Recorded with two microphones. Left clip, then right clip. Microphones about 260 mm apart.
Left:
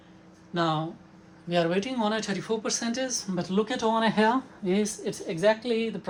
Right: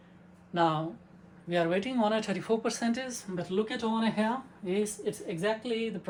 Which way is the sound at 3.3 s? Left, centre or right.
Left.